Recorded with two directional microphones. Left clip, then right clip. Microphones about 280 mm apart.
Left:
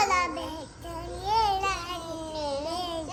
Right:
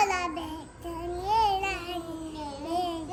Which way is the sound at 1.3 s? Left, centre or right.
Centre.